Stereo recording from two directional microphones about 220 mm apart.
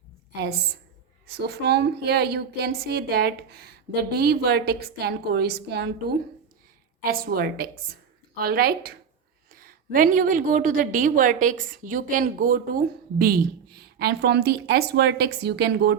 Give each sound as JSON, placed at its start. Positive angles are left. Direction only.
{"t": 1.3, "sound": "a woman's voice", "side_deg": -50}